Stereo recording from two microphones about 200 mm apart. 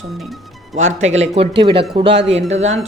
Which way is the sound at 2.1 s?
60° right (ahead or behind).